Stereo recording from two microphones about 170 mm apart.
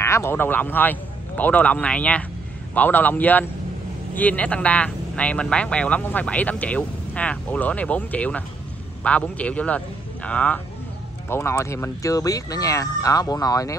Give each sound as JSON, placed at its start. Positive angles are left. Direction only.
{"t": 0.0, "sound": "a man's voice", "side_deg": 15}